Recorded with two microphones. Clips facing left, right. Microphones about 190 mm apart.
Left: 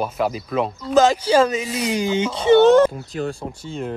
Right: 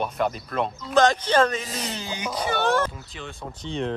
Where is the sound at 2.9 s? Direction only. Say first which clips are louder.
Left 12 dB; 40° left (ahead or behind).